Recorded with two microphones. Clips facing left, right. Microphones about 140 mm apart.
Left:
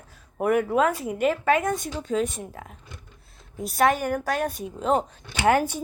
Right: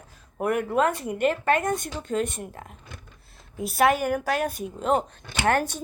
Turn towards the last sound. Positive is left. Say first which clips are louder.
# left 2 dB
turn(degrees=10)  # may be behind; listen again after turning